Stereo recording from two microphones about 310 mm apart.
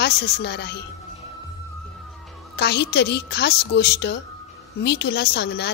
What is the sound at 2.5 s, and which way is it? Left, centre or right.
A woman's voice, left.